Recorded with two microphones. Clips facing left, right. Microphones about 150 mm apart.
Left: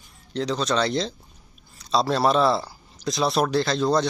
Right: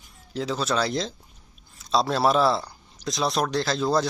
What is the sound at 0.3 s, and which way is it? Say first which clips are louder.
Speech: left 2 dB; 5° right (ahead or behind).